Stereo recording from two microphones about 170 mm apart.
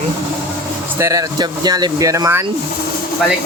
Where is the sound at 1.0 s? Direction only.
20° right (ahead or behind).